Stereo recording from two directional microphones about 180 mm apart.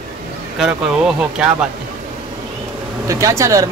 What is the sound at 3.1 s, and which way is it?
Speech, 15° right (ahead or behind).